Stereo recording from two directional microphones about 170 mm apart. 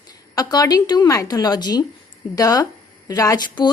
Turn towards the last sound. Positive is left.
turn(degrees=25)  # may be behind; listen again after turning